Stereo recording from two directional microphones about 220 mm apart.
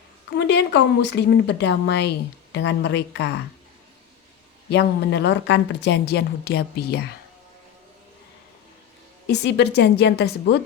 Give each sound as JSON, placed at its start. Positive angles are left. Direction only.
{"t": 0.3, "sound": "speech", "side_deg": 50}
{"t": 4.7, "sound": "speech", "side_deg": 50}
{"t": 9.2, "sound": "speech", "side_deg": 50}